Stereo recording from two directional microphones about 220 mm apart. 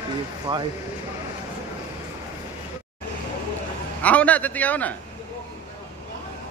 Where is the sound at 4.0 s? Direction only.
5° left (ahead or behind).